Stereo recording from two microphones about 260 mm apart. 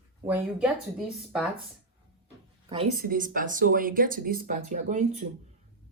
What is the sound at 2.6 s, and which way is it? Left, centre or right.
Speech, right.